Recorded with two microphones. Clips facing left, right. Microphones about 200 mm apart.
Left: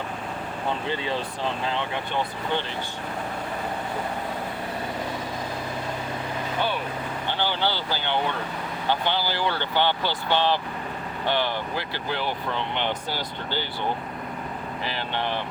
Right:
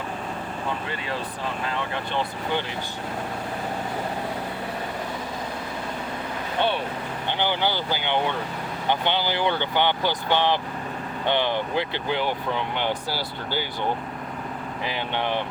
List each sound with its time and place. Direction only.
7.3 s speech: 15° right (ahead or behind)
14.8 s speech: 15° right (ahead or behind)